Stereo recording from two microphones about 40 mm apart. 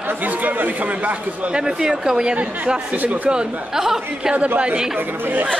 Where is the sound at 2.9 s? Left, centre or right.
Right.